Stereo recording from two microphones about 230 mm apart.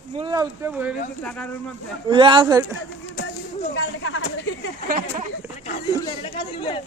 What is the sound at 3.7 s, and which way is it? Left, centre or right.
Speech, left.